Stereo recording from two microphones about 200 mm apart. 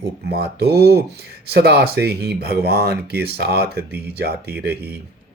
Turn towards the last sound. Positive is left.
turn(degrees=-50)  # may be behind; listen again after turning